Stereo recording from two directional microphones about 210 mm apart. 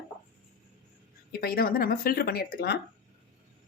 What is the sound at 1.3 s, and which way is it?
Speech, 45° left (ahead or behind).